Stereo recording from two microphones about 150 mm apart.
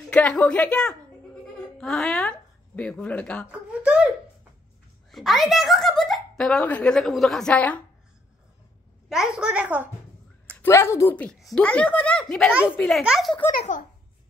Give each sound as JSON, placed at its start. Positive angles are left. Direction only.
{"t": 0.1, "sound": "a child's voice", "side_deg": 10}
{"t": 3.8, "sound": "a woman's voice", "side_deg": -10}
{"t": 5.1, "sound": "a child's voice", "side_deg": 0}
{"t": 9.1, "sound": "a woman's voice", "side_deg": -5}
{"t": 10.6, "sound": "a child's voice", "side_deg": 15}